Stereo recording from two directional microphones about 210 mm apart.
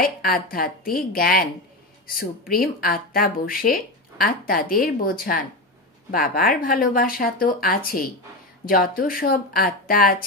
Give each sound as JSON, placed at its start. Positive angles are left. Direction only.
{"t": 0.0, "sound": "speech", "side_deg": 45}